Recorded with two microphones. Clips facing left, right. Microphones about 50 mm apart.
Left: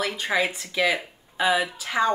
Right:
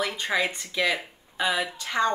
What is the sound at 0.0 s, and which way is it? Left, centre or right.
A woman's voice, centre.